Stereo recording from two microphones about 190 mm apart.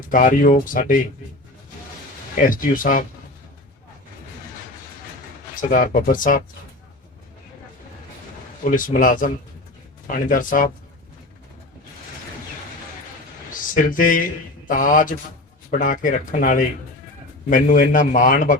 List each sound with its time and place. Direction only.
0.0 s speech: 45° left (ahead or behind)
2.3 s speech: 45° left (ahead or behind)
5.5 s speech: 45° left (ahead or behind)
8.6 s speech: 45° left (ahead or behind)
13.5 s speech: 45° left (ahead or behind)